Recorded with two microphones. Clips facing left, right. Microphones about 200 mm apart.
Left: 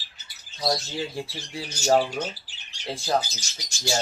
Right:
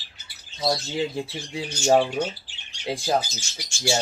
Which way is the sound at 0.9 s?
20° right (ahead or behind).